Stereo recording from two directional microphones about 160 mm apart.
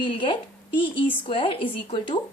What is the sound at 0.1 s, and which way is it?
A woman's voice, 30° left (ahead or behind).